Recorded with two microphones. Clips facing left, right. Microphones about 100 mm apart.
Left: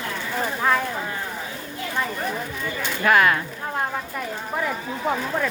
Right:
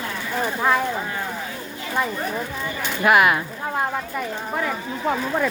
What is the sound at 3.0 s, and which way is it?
Speech, 10° right (ahead or behind).